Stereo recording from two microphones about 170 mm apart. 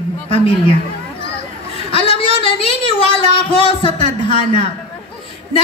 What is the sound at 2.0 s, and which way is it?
Speech, 35° left (ahead or behind).